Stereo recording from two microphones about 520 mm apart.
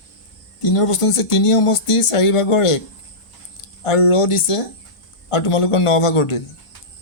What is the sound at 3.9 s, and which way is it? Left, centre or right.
Speech, left.